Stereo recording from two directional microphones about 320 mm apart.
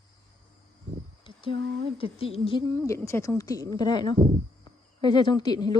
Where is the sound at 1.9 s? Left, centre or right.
Centre.